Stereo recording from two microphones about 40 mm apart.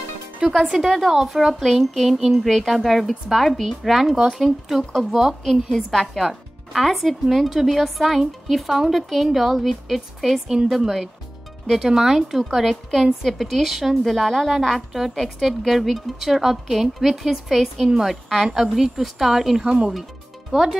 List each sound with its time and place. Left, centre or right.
0.6 s speech: centre
5.4 s speech: centre
10.5 s speech: centre
14.9 s speech: centre
18.3 s speech: centre
19.6 s speech: centre
20.5 s speech: centre